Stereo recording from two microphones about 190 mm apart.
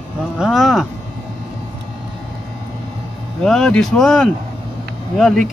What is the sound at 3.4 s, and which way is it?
A man's voice, 5° left (ahead or behind).